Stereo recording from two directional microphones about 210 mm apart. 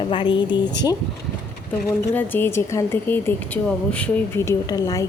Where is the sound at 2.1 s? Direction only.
10° left (ahead or behind).